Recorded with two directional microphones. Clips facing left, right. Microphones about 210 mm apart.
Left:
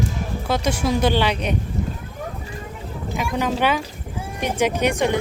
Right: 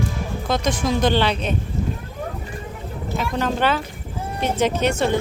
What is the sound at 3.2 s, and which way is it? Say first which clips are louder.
Speech: even; 10° left (ahead or behind).